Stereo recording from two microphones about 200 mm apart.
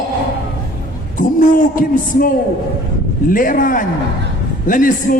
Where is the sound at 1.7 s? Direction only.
45° left (ahead or behind).